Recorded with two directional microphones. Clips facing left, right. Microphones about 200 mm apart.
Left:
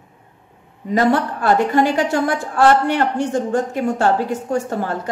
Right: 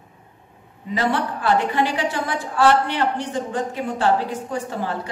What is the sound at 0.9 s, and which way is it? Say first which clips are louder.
A woman's voice: left 6 dB; 45° left (ahead or behind).